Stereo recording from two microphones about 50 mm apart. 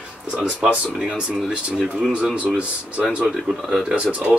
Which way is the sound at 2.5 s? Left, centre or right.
Right.